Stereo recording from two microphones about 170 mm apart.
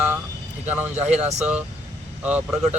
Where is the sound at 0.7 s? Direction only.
10° right (ahead or behind).